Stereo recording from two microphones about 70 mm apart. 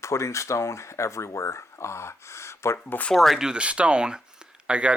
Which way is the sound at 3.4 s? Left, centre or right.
Centre.